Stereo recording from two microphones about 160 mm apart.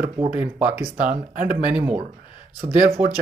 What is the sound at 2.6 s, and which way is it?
Speech, 20° right (ahead or behind).